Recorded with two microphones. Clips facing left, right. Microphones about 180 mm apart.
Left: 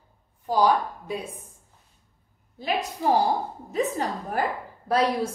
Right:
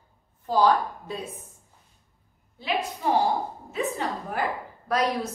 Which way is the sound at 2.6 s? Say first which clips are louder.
Left 1 dB; 45° left (ahead or behind).